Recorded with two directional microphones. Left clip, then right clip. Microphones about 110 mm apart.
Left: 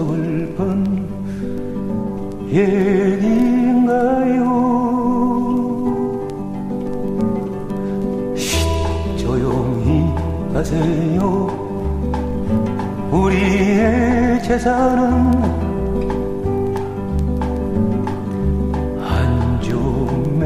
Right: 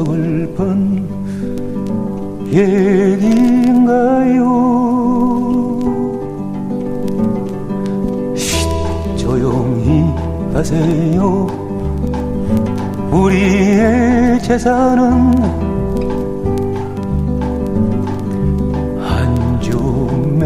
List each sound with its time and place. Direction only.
0.0 s music: 35° right (ahead or behind)
2.5 s music: 35° right (ahead or behind)
9.3 s music: 35° right (ahead or behind)
13.1 s music: 35° right (ahead or behind)
19.7 s music: 35° right (ahead or behind)